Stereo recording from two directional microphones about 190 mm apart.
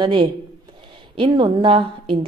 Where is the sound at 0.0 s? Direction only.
25° right (ahead or behind).